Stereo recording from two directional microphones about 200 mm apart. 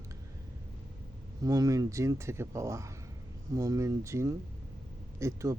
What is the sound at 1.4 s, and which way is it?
Speech, 15° right (ahead or behind).